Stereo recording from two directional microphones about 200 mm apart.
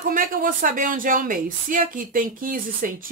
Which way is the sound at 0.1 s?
45° right (ahead or behind).